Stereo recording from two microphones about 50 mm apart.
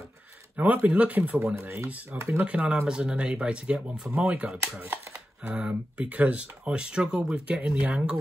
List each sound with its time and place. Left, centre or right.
0.6 s speech: right
1.4 s speech: right
2.3 s speech: centre
4.2 s speech: right